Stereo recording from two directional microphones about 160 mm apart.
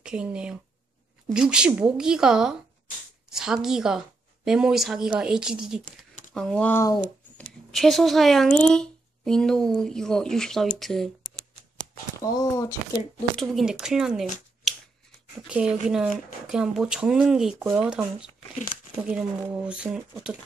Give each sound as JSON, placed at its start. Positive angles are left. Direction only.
{"t": 0.0, "sound": "a woman's voice", "side_deg": -5}
{"t": 7.7, "sound": "a woman's voice", "side_deg": 0}
{"t": 12.2, "sound": "speech", "side_deg": 20}
{"t": 13.4, "sound": "a woman's voice", "side_deg": 0}
{"t": 15.4, "sound": "a woman's voice", "side_deg": -5}